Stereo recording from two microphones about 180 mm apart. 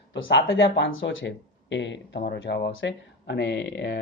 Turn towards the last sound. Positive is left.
turn(degrees=65)  # may be behind; listen again after turning